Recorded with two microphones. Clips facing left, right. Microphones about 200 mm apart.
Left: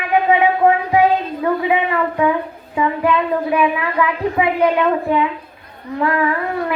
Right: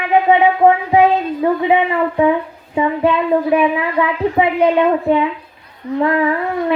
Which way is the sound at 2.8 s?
25° right (ahead or behind).